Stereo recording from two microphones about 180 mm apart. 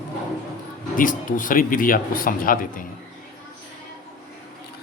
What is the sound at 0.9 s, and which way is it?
Speech, 50° left (ahead or behind).